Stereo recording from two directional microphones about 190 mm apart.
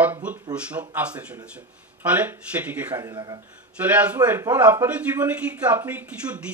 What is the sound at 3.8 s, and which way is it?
A man's voice, 10° right (ahead or behind).